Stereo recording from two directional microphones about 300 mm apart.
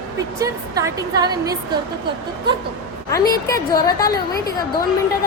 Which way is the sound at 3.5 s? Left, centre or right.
Centre.